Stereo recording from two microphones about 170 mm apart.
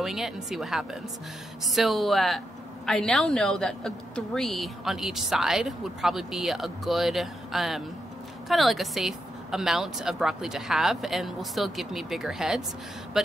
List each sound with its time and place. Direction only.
0.0 s a woman's voice: centre (ahead or behind)